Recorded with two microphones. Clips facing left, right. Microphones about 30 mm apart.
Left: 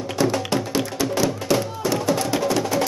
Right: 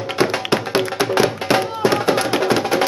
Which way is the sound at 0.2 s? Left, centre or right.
Right.